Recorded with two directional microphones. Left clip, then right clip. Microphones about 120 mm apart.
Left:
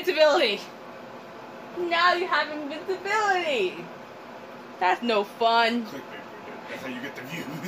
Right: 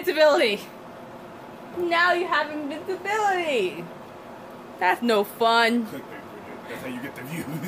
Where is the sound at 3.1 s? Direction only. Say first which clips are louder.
Right 1 dB; 30° right (ahead or behind).